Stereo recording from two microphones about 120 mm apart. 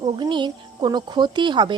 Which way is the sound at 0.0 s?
40° right (ahead or behind).